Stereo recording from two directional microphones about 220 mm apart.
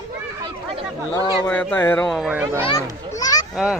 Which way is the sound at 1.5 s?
5° left (ahead or behind).